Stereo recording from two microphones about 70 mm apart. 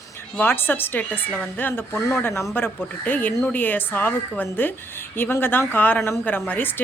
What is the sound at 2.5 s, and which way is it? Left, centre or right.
Speech, left.